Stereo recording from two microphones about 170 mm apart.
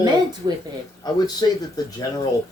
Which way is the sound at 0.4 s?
25° right (ahead or behind).